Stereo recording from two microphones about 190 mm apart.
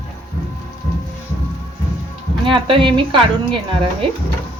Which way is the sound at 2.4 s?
25° right (ahead or behind).